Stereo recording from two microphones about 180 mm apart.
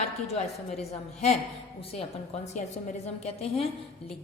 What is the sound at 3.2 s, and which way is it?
Speech, 35° left (ahead or behind).